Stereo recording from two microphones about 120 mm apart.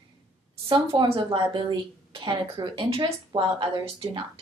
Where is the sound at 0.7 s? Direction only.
50° right (ahead or behind).